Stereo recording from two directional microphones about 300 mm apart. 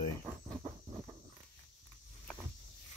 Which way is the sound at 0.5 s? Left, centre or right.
Centre.